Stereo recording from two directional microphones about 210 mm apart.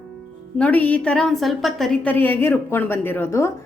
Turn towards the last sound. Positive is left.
turn(degrees=15)  # may be behind; listen again after turning